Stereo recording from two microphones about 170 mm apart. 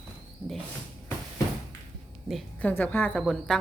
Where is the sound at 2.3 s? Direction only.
5° left (ahead or behind).